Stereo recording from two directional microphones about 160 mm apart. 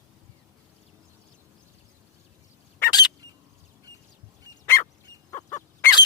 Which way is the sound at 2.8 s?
25° left (ahead or behind).